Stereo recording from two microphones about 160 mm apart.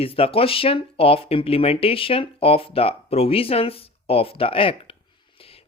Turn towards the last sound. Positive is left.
turn(degrees=35)  # may be behind; listen again after turning